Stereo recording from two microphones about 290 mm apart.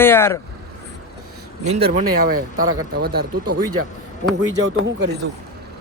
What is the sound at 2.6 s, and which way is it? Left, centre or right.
Speech, right.